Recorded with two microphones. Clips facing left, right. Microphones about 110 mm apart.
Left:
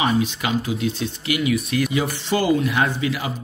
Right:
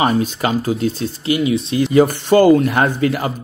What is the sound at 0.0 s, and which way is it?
Speech, 45° right (ahead or behind).